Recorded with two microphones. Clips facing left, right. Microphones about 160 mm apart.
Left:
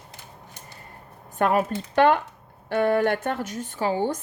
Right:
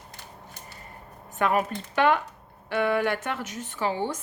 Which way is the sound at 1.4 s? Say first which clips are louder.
Left 3 dB; 40° left (ahead or behind).